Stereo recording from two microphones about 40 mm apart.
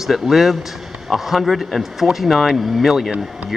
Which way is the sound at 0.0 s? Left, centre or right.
Centre.